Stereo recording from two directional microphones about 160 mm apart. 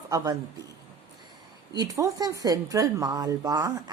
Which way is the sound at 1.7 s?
20° right (ahead or behind).